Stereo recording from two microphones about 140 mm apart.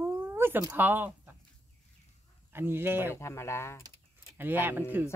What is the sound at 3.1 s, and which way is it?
Speech, 20° left (ahead or behind).